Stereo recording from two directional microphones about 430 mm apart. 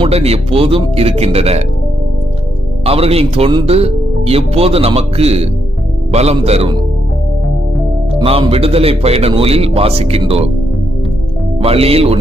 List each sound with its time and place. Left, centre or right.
0.0 s speech: centre
2.8 s speech: centre
8.2 s speech: centre
11.6 s speech: centre